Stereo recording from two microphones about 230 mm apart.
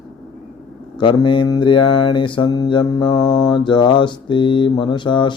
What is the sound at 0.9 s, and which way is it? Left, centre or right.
Mantra, centre.